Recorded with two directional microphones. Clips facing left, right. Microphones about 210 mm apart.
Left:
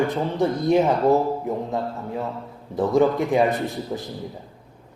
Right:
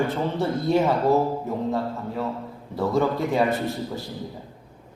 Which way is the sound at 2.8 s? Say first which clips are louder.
Left 4 dB; 15° left (ahead or behind).